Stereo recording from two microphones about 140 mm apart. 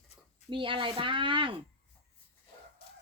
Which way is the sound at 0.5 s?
35° right (ahead or behind).